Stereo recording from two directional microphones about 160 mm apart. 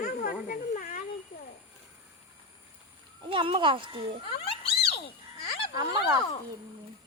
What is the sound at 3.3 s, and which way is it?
Speech, 35° right (ahead or behind).